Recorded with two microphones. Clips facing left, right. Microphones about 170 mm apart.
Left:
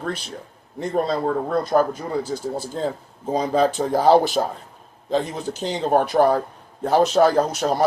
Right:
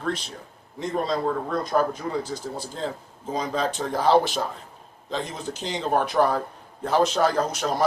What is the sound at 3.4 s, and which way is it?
Speech, 55° left (ahead or behind).